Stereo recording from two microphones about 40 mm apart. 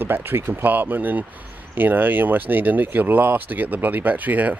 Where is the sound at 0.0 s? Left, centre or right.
Right.